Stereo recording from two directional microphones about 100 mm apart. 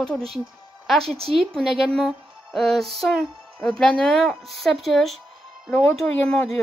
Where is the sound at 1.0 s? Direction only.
80° right.